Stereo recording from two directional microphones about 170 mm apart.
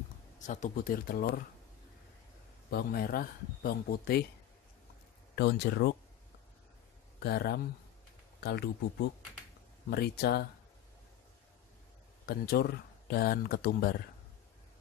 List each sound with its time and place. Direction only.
0.4 s speech: 45° left (ahead or behind)
2.7 s speech: 60° left (ahead or behind)
5.3 s speech: 70° left (ahead or behind)
7.2 s speech: 70° left (ahead or behind)
9.8 s speech: 70° left (ahead or behind)
12.3 s speech: 65° left (ahead or behind)